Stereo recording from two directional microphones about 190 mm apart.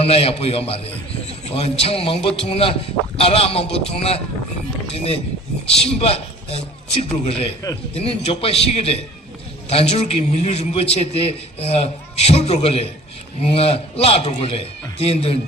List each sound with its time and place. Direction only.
0.0 s a man's voice: 30° left (ahead or behind)